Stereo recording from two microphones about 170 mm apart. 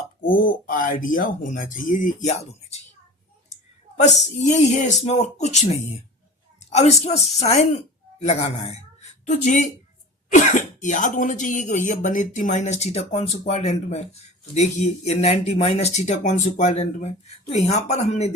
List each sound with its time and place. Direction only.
0.2 s speech: 55° left (ahead or behind)
4.0 s speech: 45° left (ahead or behind)